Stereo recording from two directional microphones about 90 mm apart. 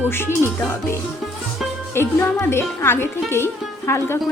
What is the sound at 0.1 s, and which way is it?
Speech, 25° left (ahead or behind).